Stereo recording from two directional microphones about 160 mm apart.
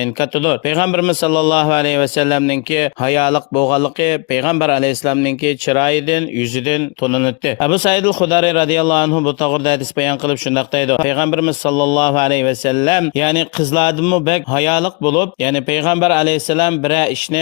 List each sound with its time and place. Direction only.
0.0 s speech: 30° left (ahead or behind)